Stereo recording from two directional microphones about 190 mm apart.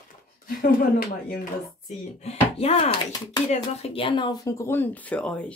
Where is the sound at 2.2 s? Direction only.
35° left (ahead or behind).